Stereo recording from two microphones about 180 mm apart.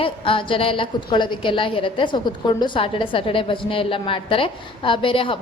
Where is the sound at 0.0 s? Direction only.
30° left (ahead or behind).